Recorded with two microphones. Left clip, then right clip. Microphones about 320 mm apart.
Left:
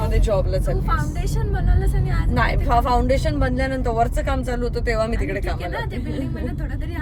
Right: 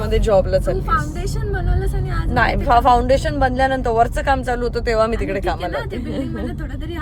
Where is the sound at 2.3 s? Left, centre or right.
Right.